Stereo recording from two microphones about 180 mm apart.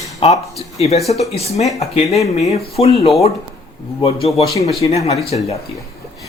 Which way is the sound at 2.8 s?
35° left (ahead or behind).